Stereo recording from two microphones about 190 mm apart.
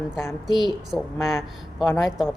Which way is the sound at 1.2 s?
Centre (ahead or behind).